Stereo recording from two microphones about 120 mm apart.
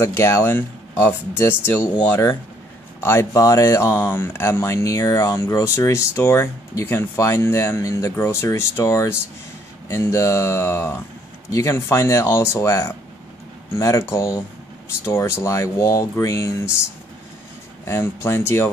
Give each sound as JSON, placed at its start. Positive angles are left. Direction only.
{"t": 0.0, "sound": "speech", "side_deg": 20}
{"t": 17.8, "sound": "speech", "side_deg": 20}